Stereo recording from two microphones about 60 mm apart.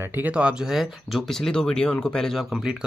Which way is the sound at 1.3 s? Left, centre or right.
Centre.